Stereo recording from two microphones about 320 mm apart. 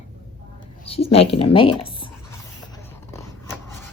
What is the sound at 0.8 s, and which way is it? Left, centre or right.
Speech, centre.